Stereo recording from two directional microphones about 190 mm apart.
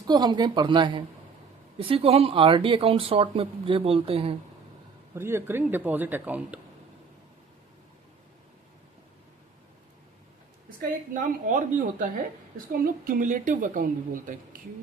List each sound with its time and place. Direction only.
0.1 s speech: 20° right (ahead or behind)
5.1 s speech: 10° right (ahead or behind)
10.8 s a woman's voice: 45° right (ahead or behind)